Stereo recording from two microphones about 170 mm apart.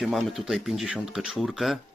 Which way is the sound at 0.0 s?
Centre (ahead or behind).